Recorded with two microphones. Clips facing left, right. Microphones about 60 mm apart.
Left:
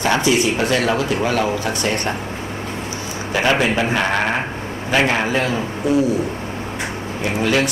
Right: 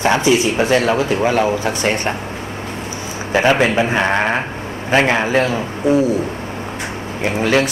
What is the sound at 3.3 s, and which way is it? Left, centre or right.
Speech, right.